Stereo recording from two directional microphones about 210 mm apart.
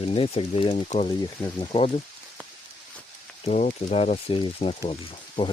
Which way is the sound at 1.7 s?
30° left (ahead or behind).